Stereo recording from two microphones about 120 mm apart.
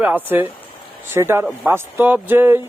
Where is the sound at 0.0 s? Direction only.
15° right (ahead or behind).